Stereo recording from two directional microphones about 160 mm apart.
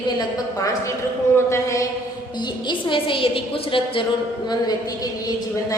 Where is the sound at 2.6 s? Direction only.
30° left (ahead or behind).